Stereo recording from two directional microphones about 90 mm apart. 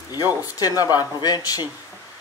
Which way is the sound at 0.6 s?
45° left (ahead or behind).